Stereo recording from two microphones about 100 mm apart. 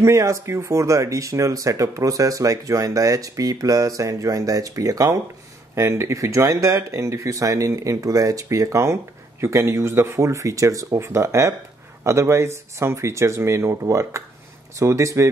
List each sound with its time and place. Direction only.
0.0 s speech: 30° right (ahead or behind)